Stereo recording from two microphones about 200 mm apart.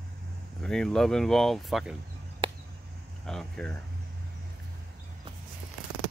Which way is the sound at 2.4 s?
25° right (ahead or behind).